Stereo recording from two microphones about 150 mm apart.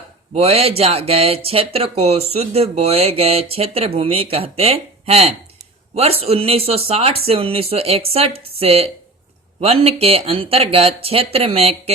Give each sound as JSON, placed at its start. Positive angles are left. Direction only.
{"t": 0.3, "sound": "speech", "side_deg": -45}